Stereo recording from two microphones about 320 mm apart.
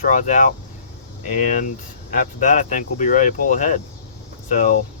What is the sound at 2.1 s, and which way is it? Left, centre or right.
Speech, left.